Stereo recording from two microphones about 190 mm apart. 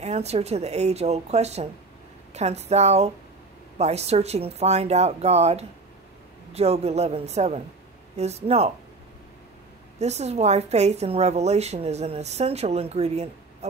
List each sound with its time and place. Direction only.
0.0 s a woman's voice: 35° right (ahead or behind)
9.9 s a woman's voice: 35° right (ahead or behind)